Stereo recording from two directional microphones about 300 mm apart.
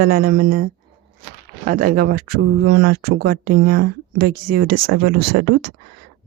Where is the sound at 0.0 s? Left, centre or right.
Right.